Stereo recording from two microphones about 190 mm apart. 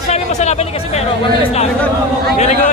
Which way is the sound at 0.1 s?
35° left (ahead or behind).